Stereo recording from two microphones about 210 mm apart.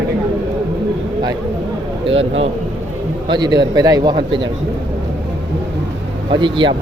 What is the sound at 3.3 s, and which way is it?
A man's voice, 20° right (ahead or behind).